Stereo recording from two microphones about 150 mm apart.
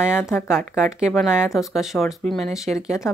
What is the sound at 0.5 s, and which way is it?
Speech, 5° right (ahead or behind).